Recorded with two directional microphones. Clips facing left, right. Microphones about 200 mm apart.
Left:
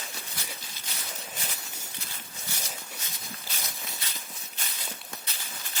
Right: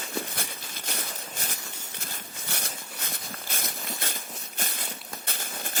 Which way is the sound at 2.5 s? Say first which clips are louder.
Right 3 dB; 60° right (ahead or behind).